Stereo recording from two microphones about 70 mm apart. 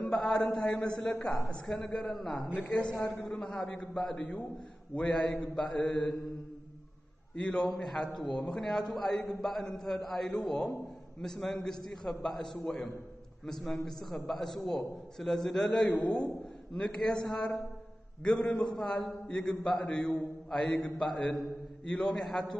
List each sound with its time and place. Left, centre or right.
0.0 s a man's voice: centre
2.7 s a man's voice: centre
7.3 s a man's voice: centre
20.4 s mantra: centre
20.8 s a man's voice: centre